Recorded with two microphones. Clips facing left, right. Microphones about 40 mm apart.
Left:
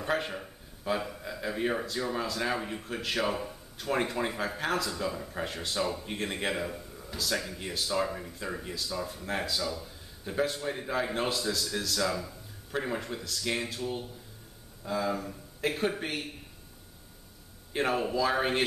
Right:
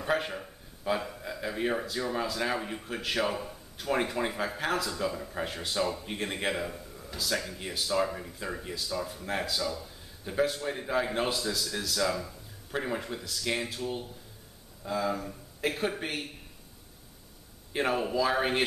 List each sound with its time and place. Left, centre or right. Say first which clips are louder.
0.0 s a man's voice: right 1 dB; centre
17.7 s a man's voice: even; centre